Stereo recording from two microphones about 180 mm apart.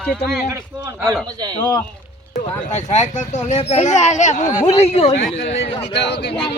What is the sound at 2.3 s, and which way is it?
A child's voice, 40° left (ahead or behind).